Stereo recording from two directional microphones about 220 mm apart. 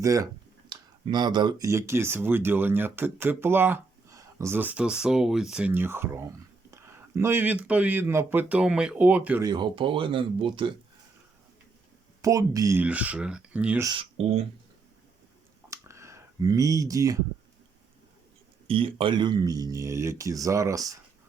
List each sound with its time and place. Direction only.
0.0 s speech: 15° right (ahead or behind)
9.5 s speech: 20° right (ahead or behind)
12.2 s speech: 15° right (ahead or behind)
13.8 s speech: 25° right (ahead or behind)
15.7 s a sound: 15° right (ahead or behind)
18.7 s speech: 25° right (ahead or behind)